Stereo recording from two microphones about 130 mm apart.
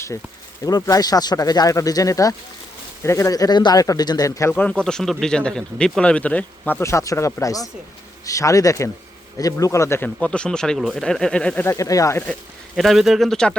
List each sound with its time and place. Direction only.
0.6 s speech: 25° left (ahead or behind)
4.5 s speech: 10° left (ahead or behind)
10.2 s speech: 10° left (ahead or behind)
11.6 s speech: 20° left (ahead or behind)
12.7 s speech: centre (ahead or behind)